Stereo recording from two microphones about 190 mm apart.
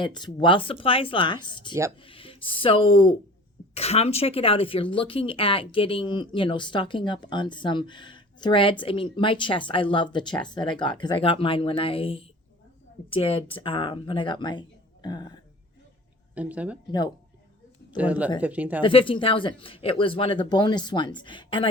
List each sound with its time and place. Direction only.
0.0 s speech: 25° left (ahead or behind)
16.3 s speech: 5° right (ahead or behind)
17.9 s speech: 10° right (ahead or behind)
18.8 s speech: 25° left (ahead or behind)